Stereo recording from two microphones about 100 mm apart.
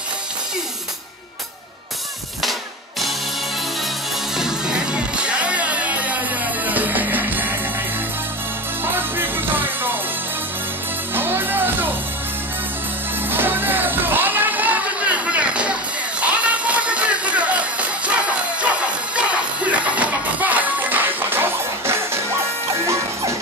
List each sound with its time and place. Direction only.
4.4 s music: 5° right (ahead or behind)
8.8 s music: 20° right (ahead or behind)
11.1 s music: 20° right (ahead or behind)
13.3 s music: 20° right (ahead or behind)